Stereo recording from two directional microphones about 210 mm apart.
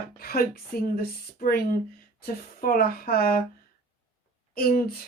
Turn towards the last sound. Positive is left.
turn(degrees=45)  # may be behind; listen again after turning